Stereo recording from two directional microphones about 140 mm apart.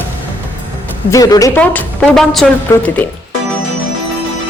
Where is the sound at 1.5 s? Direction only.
10° left (ahead or behind).